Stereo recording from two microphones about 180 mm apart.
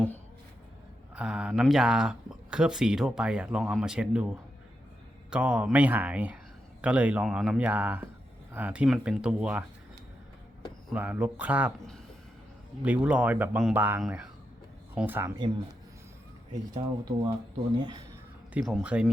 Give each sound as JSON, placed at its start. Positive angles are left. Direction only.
{"t": 1.1, "sound": "speech", "side_deg": -5}
{"t": 10.9, "sound": "speech", "side_deg": -10}
{"t": 12.8, "sound": "speech", "side_deg": -10}
{"t": 16.7, "sound": "speech", "side_deg": -20}
{"t": 18.5, "sound": "speech", "side_deg": -5}